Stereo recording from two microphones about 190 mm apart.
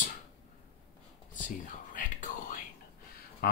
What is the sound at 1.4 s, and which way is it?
Whispering, 45° left (ahead or behind).